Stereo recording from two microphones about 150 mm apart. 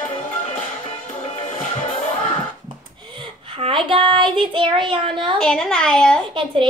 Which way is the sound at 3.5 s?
35° right (ahead or behind).